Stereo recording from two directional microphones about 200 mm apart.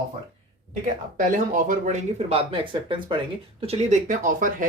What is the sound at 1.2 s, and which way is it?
Speech, 40° right (ahead or behind).